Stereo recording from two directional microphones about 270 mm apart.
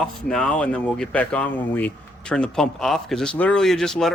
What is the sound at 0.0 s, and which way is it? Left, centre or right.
Speech, centre.